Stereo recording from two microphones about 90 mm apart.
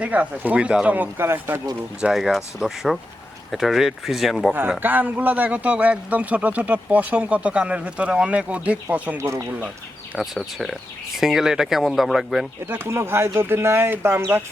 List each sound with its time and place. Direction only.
0.0 s a man's voice: 15° right (ahead or behind)
2.0 s speech: 5° right (ahead or behind)
4.8 s a man's voice: 20° right (ahead or behind)
9.1 s speech: 30° right (ahead or behind)
10.2 s speech: centre (ahead or behind)
12.6 s speech: 25° right (ahead or behind)